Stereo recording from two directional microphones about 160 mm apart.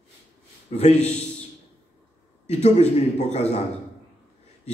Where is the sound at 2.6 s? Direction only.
45° left (ahead or behind).